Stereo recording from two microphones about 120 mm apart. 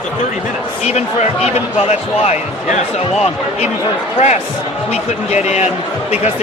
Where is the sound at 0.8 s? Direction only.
65° left (ahead or behind).